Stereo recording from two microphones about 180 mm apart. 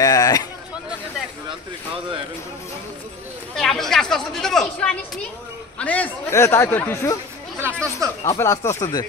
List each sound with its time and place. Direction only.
0.0 s a sound: 20° left (ahead or behind)
3.5 s a man's voice: centre (ahead or behind)
7.6 s speech: 15° right (ahead or behind)
8.3 s a man's voice: 15° left (ahead or behind)